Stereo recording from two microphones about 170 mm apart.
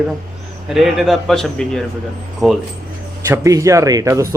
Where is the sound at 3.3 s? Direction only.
20° right (ahead or behind).